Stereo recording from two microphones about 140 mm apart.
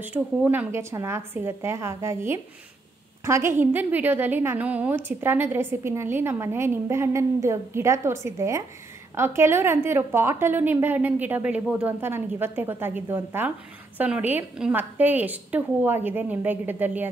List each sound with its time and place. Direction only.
0.0 s a woman's voice: 10° right (ahead or behind)